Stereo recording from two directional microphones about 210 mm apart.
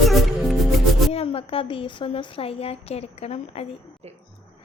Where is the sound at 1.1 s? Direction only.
25° left (ahead or behind).